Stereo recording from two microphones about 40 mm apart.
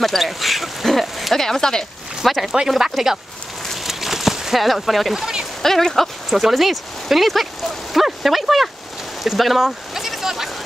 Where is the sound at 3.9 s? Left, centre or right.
Centre.